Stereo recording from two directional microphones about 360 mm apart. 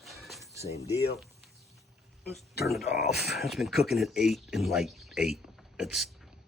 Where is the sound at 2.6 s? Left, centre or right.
Centre.